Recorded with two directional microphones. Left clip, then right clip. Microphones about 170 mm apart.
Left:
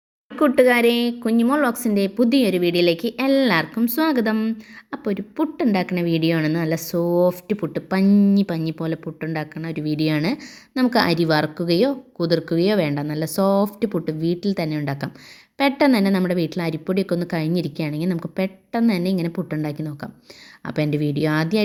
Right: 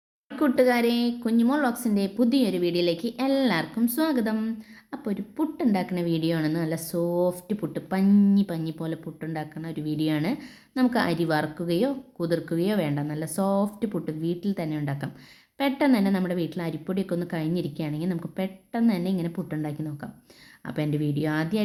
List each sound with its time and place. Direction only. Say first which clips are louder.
0.3 s speech: left 6 dB; 20° left (ahead or behind)
8.0 s speech: left 4 dB; 15° left (ahead or behind)
8.4 s speech: left 5 dB; 25° left (ahead or behind)